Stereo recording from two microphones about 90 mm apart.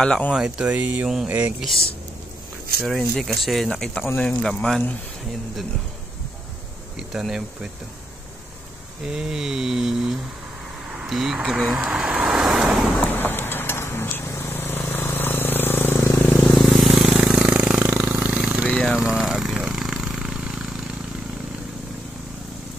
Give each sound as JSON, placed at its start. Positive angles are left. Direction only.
{"t": 0.3, "sound": "speech", "side_deg": -10}
{"t": 1.0, "sound": "speech", "side_deg": -5}
{"t": 2.8, "sound": "speech", "side_deg": 0}
{"t": 7.0, "sound": "speech", "side_deg": -5}
{"t": 9.0, "sound": "speech", "side_deg": -5}
{"t": 11.0, "sound": "vehicle", "side_deg": -5}
{"t": 13.0, "sound": "vehicle", "side_deg": 25}
{"t": 16.6, "sound": "a sound", "side_deg": 0}